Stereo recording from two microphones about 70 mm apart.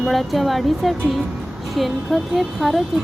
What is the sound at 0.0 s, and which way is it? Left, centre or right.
Speech, centre.